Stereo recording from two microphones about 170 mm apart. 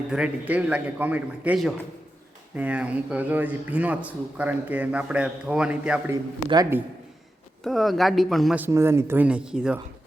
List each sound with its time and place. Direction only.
0.1 s a man's voice: 5° right (ahead or behind)
6.5 s a man's voice: 20° right (ahead or behind)
7.6 s speech: centre (ahead or behind)
8.5 s a man's voice: 15° right (ahead or behind)